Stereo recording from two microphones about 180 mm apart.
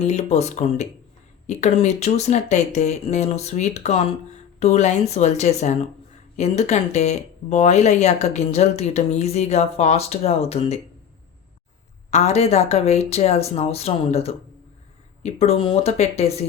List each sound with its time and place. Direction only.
0.0 s speech: 40° left (ahead or behind)
12.1 s speech: 35° left (ahead or behind)